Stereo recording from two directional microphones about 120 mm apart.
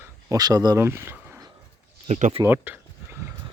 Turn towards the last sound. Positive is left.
turn(degrees=-15)  # may be behind; listen again after turning